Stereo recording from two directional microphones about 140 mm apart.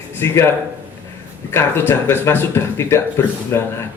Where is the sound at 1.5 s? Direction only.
15° left (ahead or behind).